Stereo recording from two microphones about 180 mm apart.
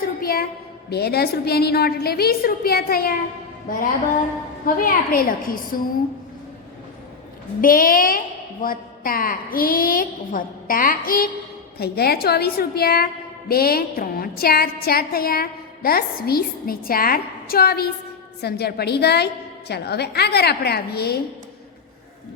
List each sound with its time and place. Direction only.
0.0 s a sound: 55° left (ahead or behind)
0.9 s a woman's voice: 65° left (ahead or behind)
4.6 s a woman's voice: 50° left (ahead or behind)
7.6 s a woman's voice: 50° left (ahead or behind)